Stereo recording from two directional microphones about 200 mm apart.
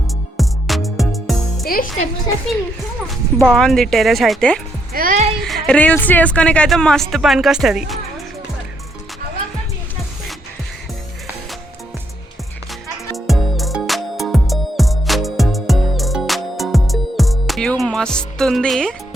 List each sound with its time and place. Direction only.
0.3 s music: centre (ahead or behind)
1.6 s speech: 45° left (ahead or behind)
3.4 s speech: centre (ahead or behind)
4.9 s speech: 45° right (ahead or behind)
5.4 s speech: centre (ahead or behind)
13.1 s music: centre (ahead or behind)